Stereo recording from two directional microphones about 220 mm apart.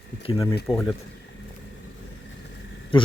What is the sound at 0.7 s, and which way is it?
Speech, 20° left (ahead or behind).